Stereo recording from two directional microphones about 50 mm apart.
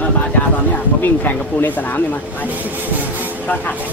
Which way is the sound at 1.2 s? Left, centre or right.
Left.